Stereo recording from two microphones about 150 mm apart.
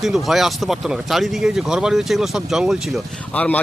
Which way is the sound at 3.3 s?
10° left (ahead or behind).